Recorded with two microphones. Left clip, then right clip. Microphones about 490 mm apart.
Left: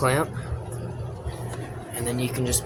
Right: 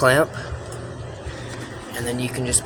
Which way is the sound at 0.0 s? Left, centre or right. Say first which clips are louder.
Right 7 dB; left.